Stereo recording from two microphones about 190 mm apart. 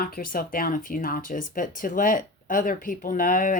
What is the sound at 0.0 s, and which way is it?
Speech, 50° left (ahead or behind).